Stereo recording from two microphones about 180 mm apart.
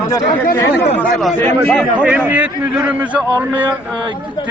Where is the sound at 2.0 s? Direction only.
10° right (ahead or behind).